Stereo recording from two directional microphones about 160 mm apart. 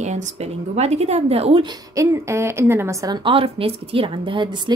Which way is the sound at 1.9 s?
15° right (ahead or behind).